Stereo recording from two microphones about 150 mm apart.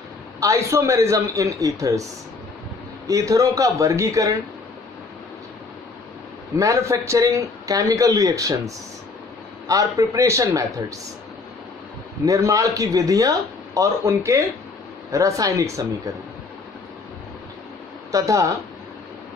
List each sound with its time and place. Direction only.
0.4 s speech: 20° right (ahead or behind)
3.1 s speech: 20° right (ahead or behind)
6.6 s speech: 20° right (ahead or behind)
12.3 s speech: 20° right (ahead or behind)
18.1 s speech: 20° right (ahead or behind)